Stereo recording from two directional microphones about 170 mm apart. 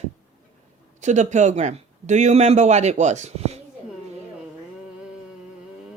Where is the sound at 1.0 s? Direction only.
45° right (ahead or behind).